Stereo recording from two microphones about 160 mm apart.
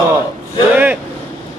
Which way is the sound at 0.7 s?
10° right (ahead or behind).